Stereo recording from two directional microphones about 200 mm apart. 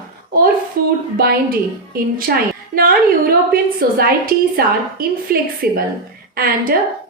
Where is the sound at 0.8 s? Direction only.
50° right (ahead or behind).